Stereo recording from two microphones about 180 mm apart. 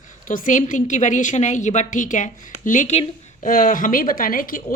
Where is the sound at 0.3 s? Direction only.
45° left (ahead or behind).